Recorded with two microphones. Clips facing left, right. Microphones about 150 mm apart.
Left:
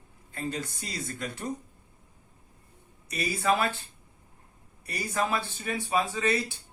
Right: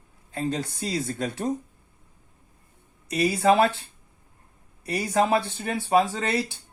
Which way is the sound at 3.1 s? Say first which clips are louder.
Right 7 dB; 65° right (ahead or behind).